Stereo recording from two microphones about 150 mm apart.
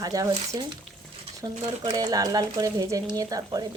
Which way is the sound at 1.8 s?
25° right (ahead or behind).